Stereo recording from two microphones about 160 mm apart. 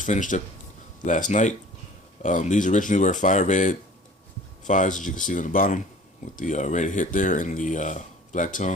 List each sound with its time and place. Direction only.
0.0 s speech: 55° left (ahead or behind)